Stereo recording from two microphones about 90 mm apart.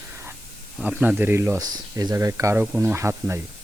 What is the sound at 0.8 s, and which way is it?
Speech, 15° right (ahead or behind).